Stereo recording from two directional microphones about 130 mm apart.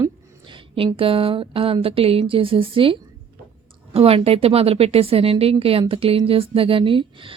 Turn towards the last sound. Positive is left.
turn(degrees=-40)  # may be behind; listen again after turning